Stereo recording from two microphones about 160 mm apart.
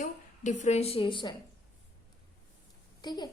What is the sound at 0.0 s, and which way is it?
A woman's voice, 50° left (ahead or behind).